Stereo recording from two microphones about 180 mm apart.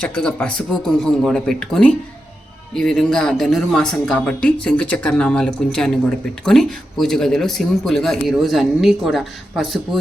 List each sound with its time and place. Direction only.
0.0 s speech: 5° left (ahead or behind)